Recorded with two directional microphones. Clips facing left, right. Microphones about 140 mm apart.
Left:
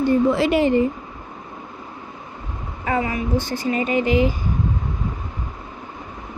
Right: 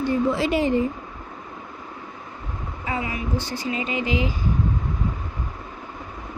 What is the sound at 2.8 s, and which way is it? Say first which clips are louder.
A woman's voice: left 6 dB; 50° left (ahead or behind).